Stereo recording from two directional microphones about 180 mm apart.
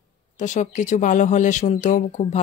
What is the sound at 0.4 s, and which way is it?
Speech, 45° left (ahead or behind).